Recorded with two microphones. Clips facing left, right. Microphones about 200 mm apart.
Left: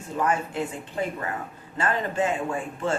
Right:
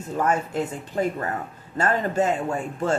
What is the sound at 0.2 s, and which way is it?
A man's voice, 40° right (ahead or behind).